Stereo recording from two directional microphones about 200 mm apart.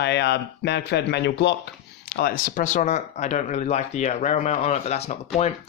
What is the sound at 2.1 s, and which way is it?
Speech, 45° left (ahead or behind).